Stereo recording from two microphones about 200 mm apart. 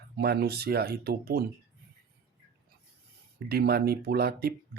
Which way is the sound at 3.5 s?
50° right (ahead or behind).